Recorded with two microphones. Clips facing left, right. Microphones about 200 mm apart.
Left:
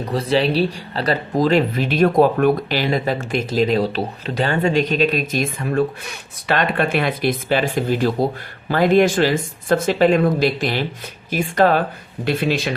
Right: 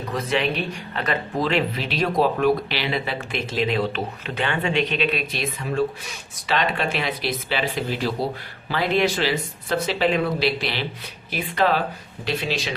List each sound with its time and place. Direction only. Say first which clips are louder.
0.0 s speech: left 5 dB; 35° left (ahead or behind); by 12.7 s 55° left (ahead or behind)